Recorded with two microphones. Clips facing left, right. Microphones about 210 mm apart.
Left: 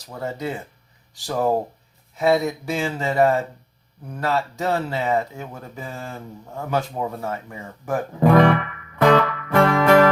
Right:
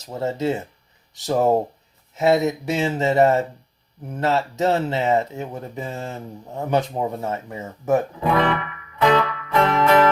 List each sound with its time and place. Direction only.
0.0 s speech: 25° right (ahead or behind)
8.2 s speech: 45° left (ahead or behind)
9.0 s music: 50° left (ahead or behind)